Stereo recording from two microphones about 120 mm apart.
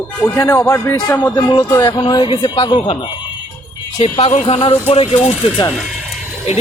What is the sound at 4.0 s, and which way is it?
Speech, 70° left (ahead or behind).